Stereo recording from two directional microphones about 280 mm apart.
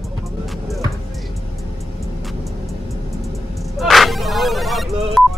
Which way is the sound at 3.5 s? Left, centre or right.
Centre.